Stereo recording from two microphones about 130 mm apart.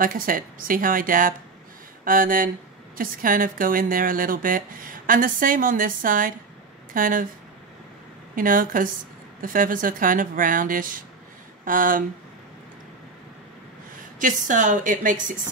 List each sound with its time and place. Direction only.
0.0 s speech: 90° right
8.4 s speech: 90° right
14.2 s speech: 75° right (ahead or behind)